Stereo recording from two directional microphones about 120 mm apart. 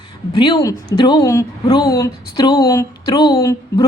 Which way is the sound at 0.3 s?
40° left (ahead or behind).